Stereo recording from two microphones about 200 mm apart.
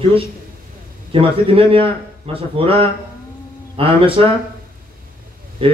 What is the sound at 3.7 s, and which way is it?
Speech, 25° right (ahead or behind).